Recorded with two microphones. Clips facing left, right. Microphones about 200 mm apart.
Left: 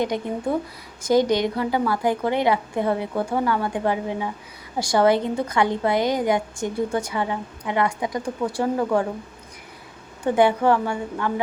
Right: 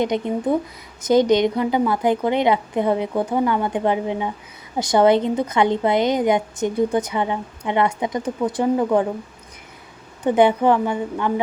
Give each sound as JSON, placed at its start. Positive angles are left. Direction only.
{"t": 0.1, "sound": "a woman's voice", "side_deg": -20}
{"t": 10.2, "sound": "a woman's voice", "side_deg": -20}